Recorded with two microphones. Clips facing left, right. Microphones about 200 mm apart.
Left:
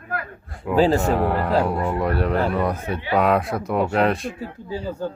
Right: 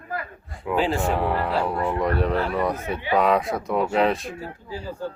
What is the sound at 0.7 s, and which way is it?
Speech, 40° left (ahead or behind).